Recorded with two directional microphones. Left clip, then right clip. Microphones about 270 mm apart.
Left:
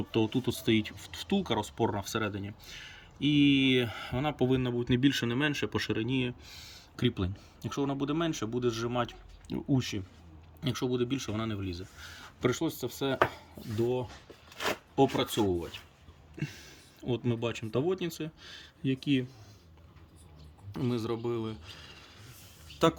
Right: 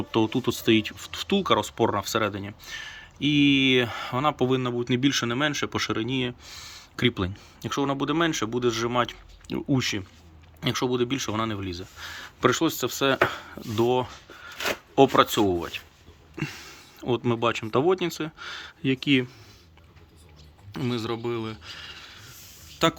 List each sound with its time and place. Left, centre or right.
0.1 s speech: centre
13.7 s speech: left
14.9 s speech: centre
20.7 s speech: centre